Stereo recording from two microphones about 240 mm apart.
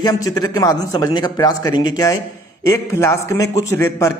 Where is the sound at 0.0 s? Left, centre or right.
Centre.